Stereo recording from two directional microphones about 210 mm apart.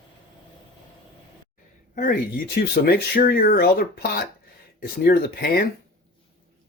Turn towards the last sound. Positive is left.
turn(degrees=45)  # may be behind; listen again after turning